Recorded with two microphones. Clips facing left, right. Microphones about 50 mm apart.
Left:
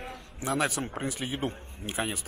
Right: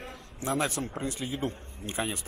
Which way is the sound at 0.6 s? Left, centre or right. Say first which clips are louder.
Left 3 dB; left.